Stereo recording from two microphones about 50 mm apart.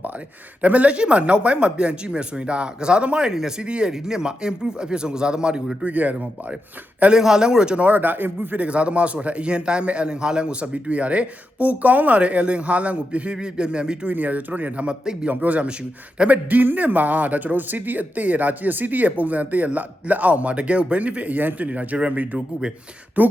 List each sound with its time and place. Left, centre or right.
0.6 s a man's voice: right
5.8 s speech: right
7.1 s a man's voice: centre
7.9 s speech: right
8.6 s a man's voice: right
14.1 s a man's voice: right
16.5 s speech: right